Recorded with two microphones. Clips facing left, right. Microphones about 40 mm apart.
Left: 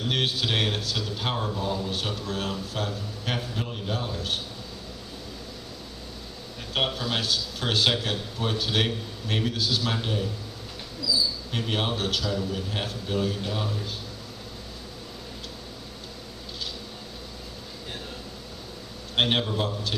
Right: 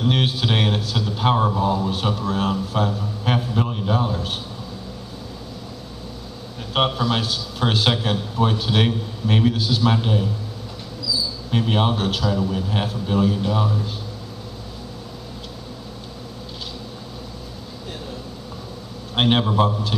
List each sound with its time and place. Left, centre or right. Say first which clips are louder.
0.0 s a man's voice: right 5 dB; centre
6.7 s a man's voice: right 7 dB; right
11.5 s a man's voice: right 9 dB; centre
19.1 s a man's voice: right 6 dB; centre